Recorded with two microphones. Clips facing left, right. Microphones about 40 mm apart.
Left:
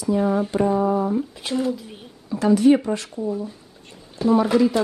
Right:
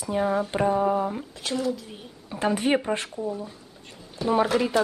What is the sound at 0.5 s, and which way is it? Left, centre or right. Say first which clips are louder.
Speech: left 2 dB; right.